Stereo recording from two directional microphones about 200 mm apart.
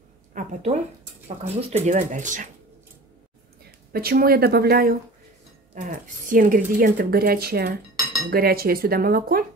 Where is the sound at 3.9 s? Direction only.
50° right (ahead or behind).